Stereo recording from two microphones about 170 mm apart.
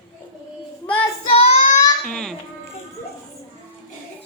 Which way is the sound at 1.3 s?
40° left (ahead or behind).